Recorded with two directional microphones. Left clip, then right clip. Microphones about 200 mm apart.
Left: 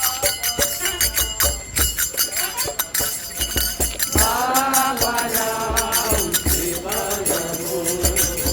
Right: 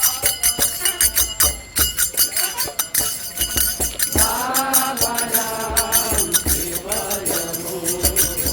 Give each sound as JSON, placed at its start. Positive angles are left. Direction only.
{"t": 0.0, "sound": "music", "side_deg": -30}
{"t": 4.1, "sound": "music", "side_deg": -25}